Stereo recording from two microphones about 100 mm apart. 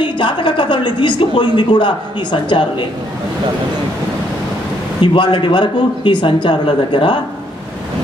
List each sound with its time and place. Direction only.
0.0 s a woman's voice: 55° left (ahead or behind)
5.0 s a woman's voice: 55° left (ahead or behind)